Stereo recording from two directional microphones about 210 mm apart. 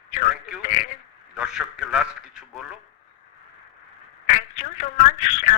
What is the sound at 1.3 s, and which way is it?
Speech, 5° right (ahead or behind).